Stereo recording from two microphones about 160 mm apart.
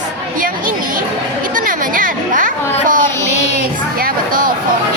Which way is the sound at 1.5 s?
60° right (ahead or behind).